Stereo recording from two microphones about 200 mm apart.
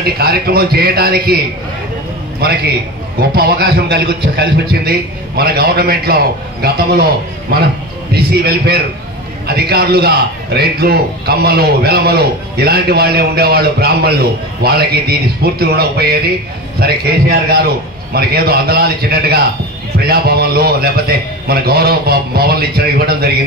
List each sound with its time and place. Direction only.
0.0 s a man's voice: 50° right (ahead or behind)
2.4 s a man's voice: 50° right (ahead or behind)
8.1 s a man's voice: 50° right (ahead or behind)